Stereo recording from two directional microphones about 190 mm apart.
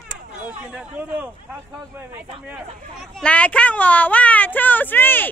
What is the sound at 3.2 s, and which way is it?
Speech, 5° left (ahead or behind).